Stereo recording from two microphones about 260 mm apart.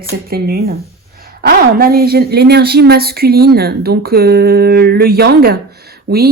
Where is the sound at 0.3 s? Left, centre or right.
Right.